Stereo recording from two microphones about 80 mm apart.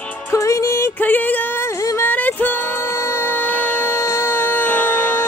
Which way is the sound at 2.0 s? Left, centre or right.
Left.